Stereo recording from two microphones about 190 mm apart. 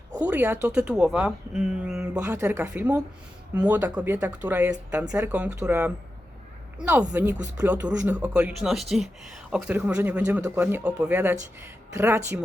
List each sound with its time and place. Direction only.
0.2 s speech: 10° right (ahead or behind)